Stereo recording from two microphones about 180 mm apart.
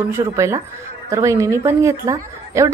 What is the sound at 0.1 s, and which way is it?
A woman's voice, 15° right (ahead or behind).